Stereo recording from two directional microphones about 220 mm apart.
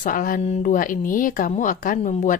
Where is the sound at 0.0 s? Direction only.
40° left (ahead or behind).